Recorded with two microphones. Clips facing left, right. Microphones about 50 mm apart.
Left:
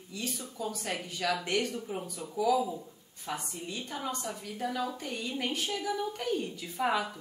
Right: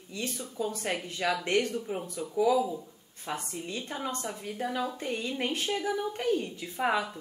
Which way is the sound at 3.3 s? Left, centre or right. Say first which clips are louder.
Right 2 dB; right.